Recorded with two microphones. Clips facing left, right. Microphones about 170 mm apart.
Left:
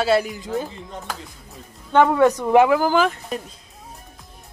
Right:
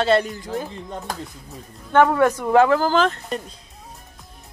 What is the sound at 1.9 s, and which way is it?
Speech, 15° left (ahead or behind).